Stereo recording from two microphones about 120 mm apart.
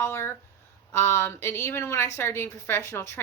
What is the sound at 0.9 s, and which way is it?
A woman's voice, 20° left (ahead or behind).